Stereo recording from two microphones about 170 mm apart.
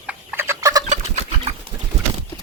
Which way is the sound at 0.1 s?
10° right (ahead or behind).